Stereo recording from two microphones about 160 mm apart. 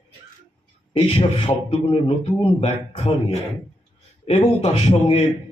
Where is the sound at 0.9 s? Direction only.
35° left (ahead or behind).